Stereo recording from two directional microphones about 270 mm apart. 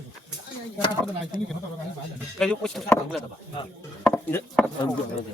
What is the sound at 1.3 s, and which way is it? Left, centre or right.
Speech, left.